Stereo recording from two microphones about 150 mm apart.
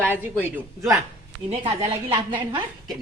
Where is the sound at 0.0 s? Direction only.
15° right (ahead or behind).